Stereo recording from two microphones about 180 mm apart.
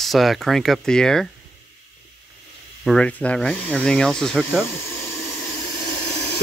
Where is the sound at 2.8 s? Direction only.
5° left (ahead or behind).